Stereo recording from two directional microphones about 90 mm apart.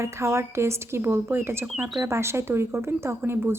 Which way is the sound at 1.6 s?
15° right (ahead or behind).